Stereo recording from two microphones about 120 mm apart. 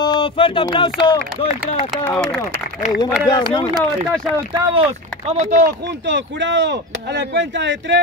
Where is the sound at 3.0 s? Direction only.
35° left (ahead or behind).